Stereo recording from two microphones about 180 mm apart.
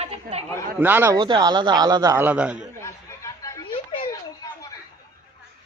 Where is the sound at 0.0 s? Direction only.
35° right (ahead or behind).